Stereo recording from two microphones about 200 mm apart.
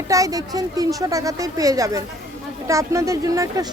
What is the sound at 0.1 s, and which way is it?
A woman's voice, 15° right (ahead or behind).